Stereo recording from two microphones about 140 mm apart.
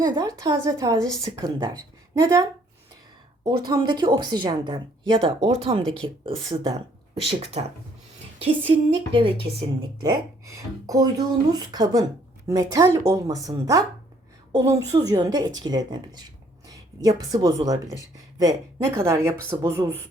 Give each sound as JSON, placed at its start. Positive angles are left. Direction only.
{"t": 0.0, "sound": "a woman's voice", "side_deg": -30}
{"t": 7.2, "sound": "speech", "side_deg": -45}
{"t": 9.1, "sound": "speech", "side_deg": -40}
{"t": 10.0, "sound": "a woman's voice", "side_deg": -25}